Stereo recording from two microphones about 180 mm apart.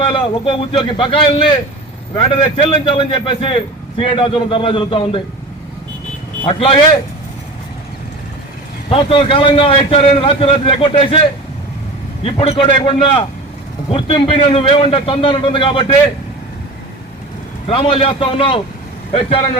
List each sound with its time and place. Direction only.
0.1 s a man's voice: 30° left (ahead or behind)
6.4 s a man's voice: 30° left (ahead or behind)
8.9 s a man's voice: 30° left (ahead or behind)
12.2 s a man's voice: 30° left (ahead or behind)
17.7 s a man's voice: 30° left (ahead or behind)